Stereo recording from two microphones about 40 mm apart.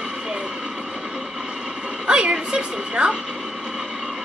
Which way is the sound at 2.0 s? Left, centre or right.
Right.